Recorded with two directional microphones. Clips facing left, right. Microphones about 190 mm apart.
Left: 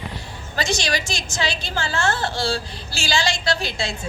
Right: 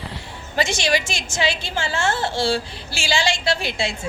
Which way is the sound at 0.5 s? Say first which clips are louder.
Right 3 dB; 25° right (ahead or behind).